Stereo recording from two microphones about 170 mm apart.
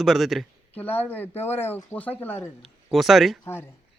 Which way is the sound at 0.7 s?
10° left (ahead or behind).